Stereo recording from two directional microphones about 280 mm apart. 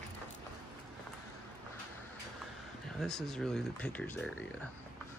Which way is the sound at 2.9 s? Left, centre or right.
Centre.